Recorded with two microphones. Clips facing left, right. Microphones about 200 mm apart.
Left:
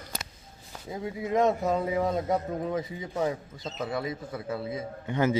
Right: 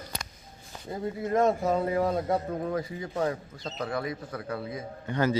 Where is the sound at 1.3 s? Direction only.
Centre (ahead or behind).